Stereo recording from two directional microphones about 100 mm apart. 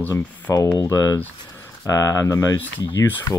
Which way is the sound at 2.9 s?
20° left (ahead or behind).